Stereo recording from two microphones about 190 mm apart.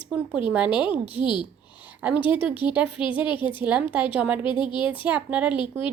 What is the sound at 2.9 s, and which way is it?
Speech, 25° left (ahead or behind).